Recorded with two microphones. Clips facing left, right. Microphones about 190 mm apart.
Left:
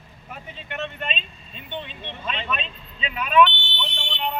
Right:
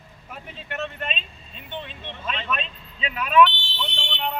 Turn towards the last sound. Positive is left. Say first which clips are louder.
# left 1 dB
turn(degrees=0)  # may be behind; listen again after turning